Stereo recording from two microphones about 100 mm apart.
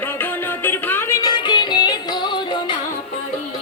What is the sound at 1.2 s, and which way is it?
Music, 50° left (ahead or behind).